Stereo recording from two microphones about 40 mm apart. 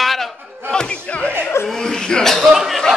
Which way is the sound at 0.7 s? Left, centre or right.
Left.